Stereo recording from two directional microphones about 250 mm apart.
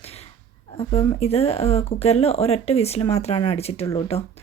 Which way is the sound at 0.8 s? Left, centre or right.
Left.